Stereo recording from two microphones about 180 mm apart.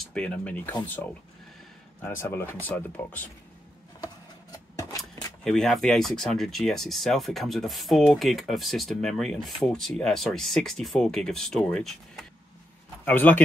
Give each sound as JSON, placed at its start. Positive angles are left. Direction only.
{"t": 0.1, "sound": "speech", "side_deg": 5}
{"t": 2.2, "sound": "speech", "side_deg": 15}
{"t": 4.0, "sound": "a sound", "side_deg": 20}
{"t": 5.4, "sound": "speech", "side_deg": 0}